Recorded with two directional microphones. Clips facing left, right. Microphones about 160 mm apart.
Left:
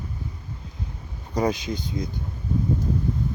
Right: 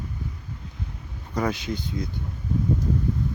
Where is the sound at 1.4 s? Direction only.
20° left (ahead or behind).